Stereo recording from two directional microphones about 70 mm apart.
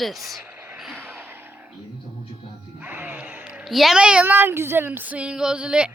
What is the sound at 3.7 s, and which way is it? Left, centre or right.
Speech, centre.